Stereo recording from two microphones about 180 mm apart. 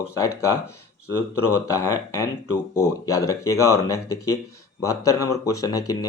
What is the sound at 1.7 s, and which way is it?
Speech, 15° left (ahead or behind).